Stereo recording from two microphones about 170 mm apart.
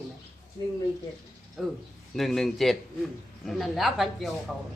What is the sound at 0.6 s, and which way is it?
Speech, 25° left (ahead or behind).